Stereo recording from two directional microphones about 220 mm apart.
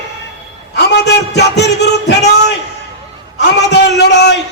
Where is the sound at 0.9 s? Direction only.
50° left (ahead or behind).